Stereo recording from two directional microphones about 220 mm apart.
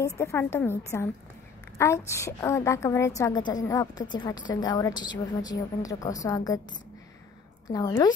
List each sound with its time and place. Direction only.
0.2 s a woman's voice: 10° left (ahead or behind)
1.8 s a woman's voice: 10° left (ahead or behind)
7.7 s a woman's voice: 15° left (ahead or behind)